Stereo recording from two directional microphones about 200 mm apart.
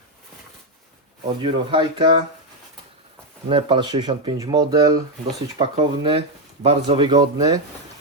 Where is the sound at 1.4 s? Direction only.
25° right (ahead or behind).